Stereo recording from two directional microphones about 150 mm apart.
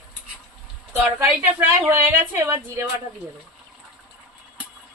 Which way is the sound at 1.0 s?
10° right (ahead or behind).